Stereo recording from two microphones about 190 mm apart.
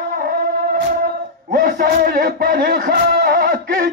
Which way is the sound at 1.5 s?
45° right (ahead or behind).